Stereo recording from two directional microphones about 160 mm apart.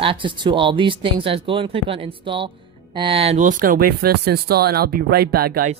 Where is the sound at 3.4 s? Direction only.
55° right (ahead or behind).